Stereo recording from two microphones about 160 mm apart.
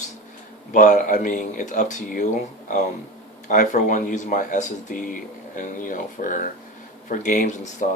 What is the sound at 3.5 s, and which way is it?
Speech, 55° left (ahead or behind).